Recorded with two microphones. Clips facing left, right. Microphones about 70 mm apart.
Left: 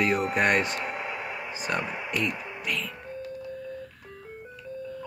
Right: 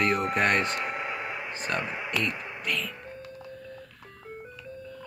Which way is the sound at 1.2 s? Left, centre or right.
Right.